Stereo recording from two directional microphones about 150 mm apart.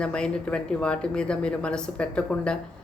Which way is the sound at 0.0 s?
5° left (ahead or behind).